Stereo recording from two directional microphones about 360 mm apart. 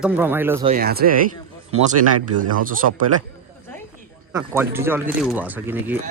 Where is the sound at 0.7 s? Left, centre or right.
Right.